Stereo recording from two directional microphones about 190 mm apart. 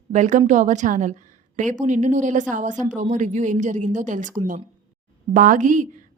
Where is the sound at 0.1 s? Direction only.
40° right (ahead or behind).